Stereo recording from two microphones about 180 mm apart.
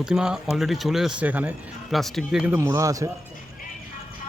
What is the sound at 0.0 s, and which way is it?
Speech, 5° right (ahead or behind).